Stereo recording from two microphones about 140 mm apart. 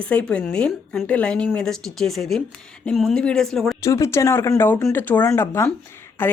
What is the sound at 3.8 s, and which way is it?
A woman's voice, 20° left (ahead or behind).